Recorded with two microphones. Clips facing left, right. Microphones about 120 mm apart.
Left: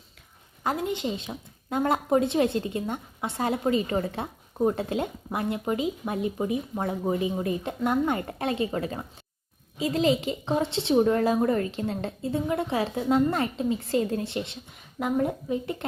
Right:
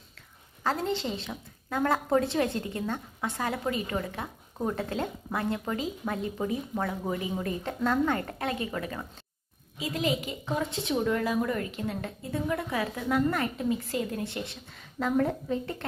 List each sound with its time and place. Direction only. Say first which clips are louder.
0.6 s a woman's voice: left 1 dB; 15° left (ahead or behind)